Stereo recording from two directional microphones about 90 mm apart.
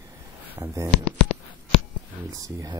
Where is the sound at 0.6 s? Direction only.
35° right (ahead or behind).